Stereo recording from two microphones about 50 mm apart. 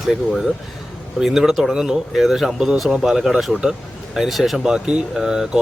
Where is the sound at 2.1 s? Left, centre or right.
Centre.